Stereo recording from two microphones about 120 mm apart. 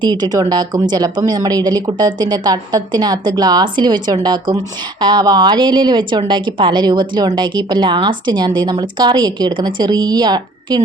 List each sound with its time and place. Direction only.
0.0 s speech: 35° right (ahead or behind)